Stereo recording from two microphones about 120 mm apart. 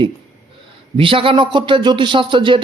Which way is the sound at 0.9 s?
45° right (ahead or behind).